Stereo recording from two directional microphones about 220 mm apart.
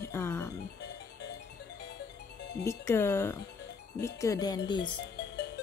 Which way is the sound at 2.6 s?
10° left (ahead or behind).